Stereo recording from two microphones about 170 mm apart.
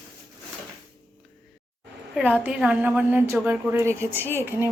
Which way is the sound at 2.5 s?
5° right (ahead or behind).